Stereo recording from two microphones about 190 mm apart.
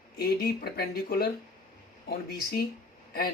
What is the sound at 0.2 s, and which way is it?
Speech, 55° left (ahead or behind).